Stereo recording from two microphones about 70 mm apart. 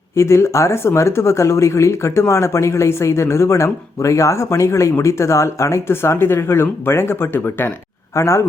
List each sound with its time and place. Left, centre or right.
0.2 s speech: left
8.1 s speech: left